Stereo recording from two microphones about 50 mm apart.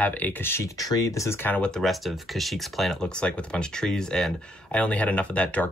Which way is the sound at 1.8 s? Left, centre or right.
Centre.